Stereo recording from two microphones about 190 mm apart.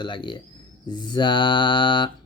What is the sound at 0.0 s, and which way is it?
Mantra, 25° left (ahead or behind).